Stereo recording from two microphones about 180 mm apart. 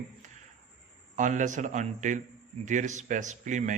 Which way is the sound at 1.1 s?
45° right (ahead or behind).